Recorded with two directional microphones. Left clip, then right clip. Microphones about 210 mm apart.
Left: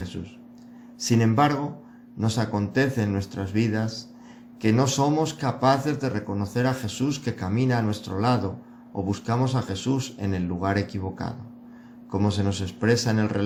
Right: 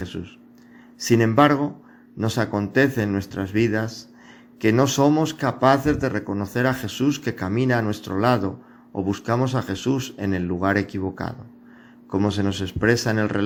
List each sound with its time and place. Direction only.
0.9 s speech: 35° right (ahead or behind)